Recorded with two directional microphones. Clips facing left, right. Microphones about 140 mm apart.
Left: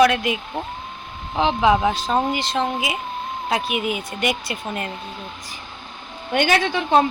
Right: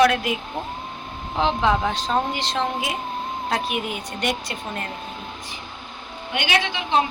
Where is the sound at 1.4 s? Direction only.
5° left (ahead or behind).